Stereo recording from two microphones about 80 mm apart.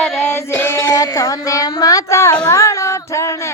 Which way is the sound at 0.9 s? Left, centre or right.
Left.